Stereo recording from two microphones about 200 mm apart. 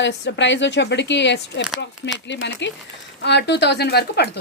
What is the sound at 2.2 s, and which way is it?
A woman's voice, 60° left (ahead or behind).